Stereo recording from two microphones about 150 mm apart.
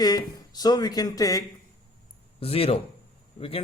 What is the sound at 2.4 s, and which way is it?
Speech, 40° left (ahead or behind).